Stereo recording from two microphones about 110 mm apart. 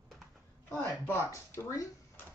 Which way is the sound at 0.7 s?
20° left (ahead or behind).